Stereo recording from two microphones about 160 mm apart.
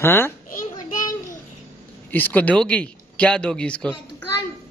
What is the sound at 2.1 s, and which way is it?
A child's voice, 10° left (ahead or behind).